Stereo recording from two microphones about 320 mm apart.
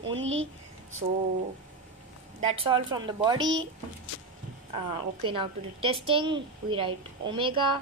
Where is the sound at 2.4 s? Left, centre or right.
Centre.